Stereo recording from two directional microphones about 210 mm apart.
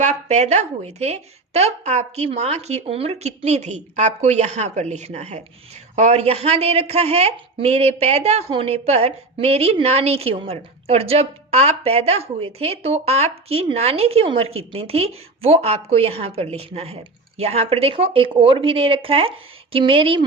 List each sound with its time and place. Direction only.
0.0 s a woman's voice: 35° right (ahead or behind)